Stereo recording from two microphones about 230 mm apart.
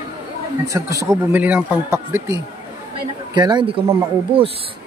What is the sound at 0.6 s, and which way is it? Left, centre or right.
Speech, centre.